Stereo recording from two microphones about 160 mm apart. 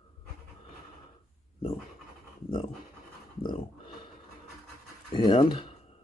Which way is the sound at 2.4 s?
30° left (ahead or behind).